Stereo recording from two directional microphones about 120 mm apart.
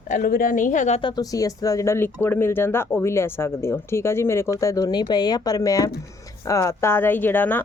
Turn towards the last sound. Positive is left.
turn(degrees=15)  # may be behind; listen again after turning